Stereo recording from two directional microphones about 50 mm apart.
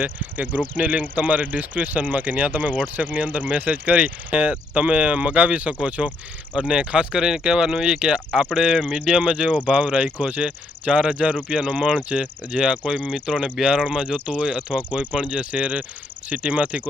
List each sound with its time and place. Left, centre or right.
0.0 s speech: right